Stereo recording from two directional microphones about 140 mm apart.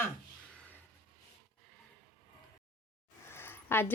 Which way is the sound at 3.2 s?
15° left (ahead or behind).